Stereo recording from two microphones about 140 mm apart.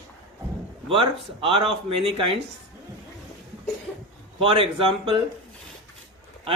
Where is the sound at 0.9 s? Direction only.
40° right (ahead or behind).